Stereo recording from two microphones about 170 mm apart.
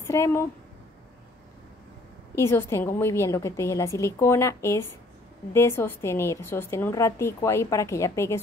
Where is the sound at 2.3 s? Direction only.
15° left (ahead or behind).